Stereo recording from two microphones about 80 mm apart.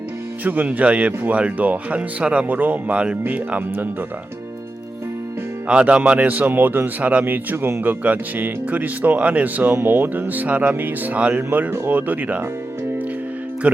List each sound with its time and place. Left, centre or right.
0.4 s speech: right
5.6 s speech: centre